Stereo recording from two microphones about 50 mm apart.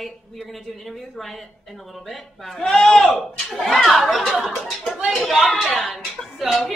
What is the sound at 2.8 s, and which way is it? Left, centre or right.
Speech, left.